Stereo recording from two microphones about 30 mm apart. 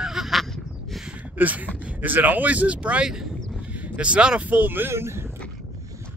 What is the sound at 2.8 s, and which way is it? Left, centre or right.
Speech, right.